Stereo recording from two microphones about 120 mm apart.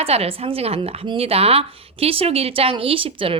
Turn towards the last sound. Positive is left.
turn(degrees=-50)  # may be behind; listen again after turning